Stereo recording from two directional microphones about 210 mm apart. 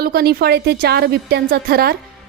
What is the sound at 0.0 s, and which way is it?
A woman's voice, 45° right (ahead or behind).